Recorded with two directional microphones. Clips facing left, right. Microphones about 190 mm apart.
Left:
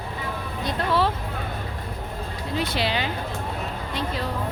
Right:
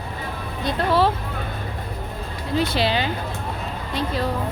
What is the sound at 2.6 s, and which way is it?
Speech, 30° right (ahead or behind).